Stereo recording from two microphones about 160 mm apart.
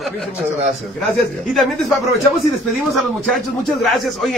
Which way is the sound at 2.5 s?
Centre (ahead or behind).